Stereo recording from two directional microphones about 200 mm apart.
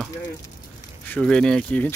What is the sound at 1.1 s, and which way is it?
Speech, 5° left (ahead or behind).